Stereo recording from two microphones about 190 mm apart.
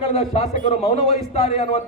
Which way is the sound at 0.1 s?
30° left (ahead or behind).